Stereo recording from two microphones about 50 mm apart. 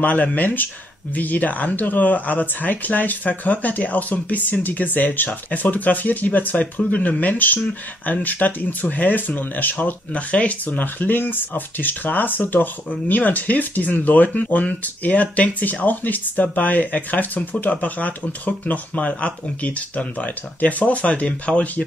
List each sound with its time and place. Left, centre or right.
0.0 s speech: left